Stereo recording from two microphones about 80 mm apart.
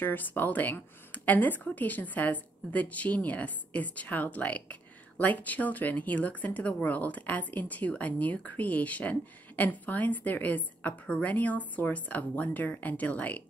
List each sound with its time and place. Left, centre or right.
0.0 s speech: left